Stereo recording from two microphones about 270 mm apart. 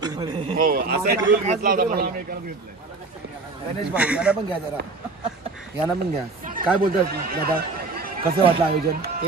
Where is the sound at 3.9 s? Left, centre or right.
Centre.